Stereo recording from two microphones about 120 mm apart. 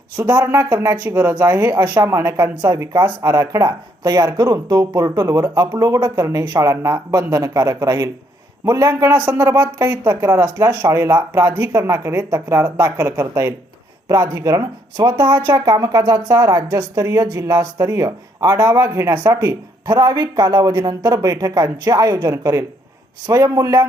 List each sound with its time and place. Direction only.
0.2 s speech: 30° right (ahead or behind)
9.2 s speech: 15° right (ahead or behind)
9.6 s speech: 30° right (ahead or behind)
19.9 s speech: 35° right (ahead or behind)